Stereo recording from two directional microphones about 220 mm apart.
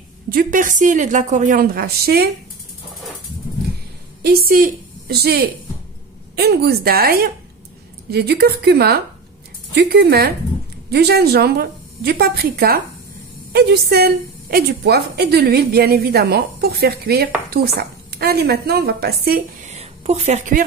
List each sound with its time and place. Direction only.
0.3 s a woman's voice: 40° right (ahead or behind)
4.2 s a woman's voice: 40° right (ahead or behind)
19.6 s a sound: 30° right (ahead or behind)